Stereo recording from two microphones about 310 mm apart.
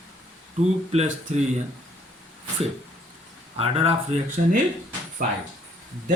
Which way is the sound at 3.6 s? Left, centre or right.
Centre.